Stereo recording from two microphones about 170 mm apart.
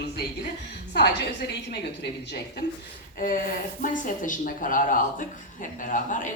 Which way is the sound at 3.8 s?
50° left (ahead or behind).